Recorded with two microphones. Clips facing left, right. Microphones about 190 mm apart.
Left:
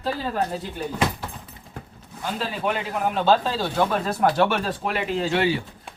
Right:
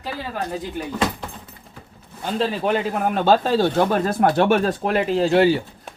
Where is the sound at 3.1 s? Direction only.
50° right (ahead or behind).